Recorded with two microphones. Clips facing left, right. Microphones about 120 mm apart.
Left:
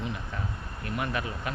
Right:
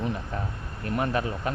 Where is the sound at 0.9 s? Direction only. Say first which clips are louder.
Right 5 dB; 35° right (ahead or behind).